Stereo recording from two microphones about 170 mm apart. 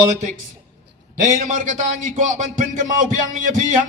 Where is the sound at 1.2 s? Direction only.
50° right (ahead or behind).